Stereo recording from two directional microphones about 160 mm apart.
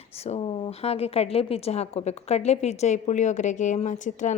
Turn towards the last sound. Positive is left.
turn(degrees=50)  # may be behind; listen again after turning